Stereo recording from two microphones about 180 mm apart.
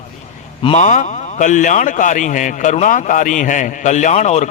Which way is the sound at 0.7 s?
40° left (ahead or behind).